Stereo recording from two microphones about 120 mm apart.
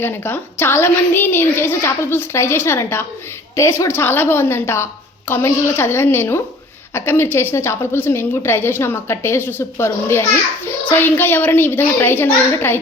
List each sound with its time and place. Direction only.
0.0 s a woman's voice: 20° left (ahead or behind)